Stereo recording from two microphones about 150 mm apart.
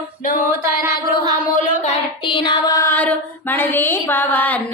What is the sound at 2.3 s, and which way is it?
Child singing, 30° left (ahead or behind).